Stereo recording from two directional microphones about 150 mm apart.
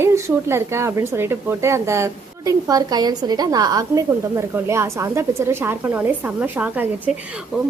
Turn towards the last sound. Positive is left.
turn(degrees=-10)  # may be behind; listen again after turning